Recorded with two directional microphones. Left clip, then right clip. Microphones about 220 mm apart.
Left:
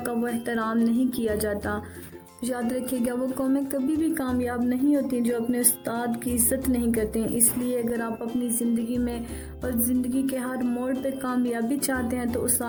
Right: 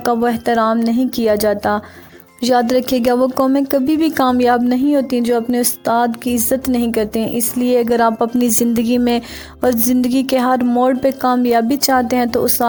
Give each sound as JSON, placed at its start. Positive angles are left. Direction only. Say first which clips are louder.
{"t": 0.0, "sound": "a woman's voice", "louder": "right 13 dB", "side_deg": -30}